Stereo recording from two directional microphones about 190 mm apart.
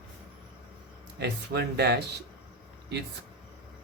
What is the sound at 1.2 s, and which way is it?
Speech, 60° right (ahead or behind).